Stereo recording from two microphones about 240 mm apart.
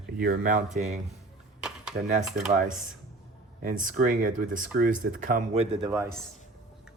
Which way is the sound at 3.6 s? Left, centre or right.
Right.